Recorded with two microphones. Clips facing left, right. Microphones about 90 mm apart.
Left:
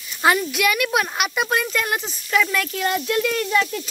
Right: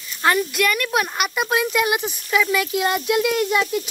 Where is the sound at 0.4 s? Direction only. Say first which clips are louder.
Even; centre (ahead or behind).